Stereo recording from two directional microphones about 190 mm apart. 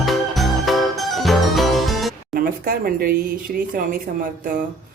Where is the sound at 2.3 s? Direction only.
50° right (ahead or behind).